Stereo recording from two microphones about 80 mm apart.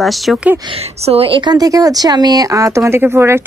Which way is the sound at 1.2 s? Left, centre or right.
Right.